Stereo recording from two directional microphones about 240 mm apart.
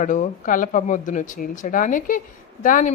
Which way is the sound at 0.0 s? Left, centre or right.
Left.